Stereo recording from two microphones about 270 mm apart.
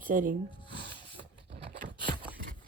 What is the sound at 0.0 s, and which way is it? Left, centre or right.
Speech, right.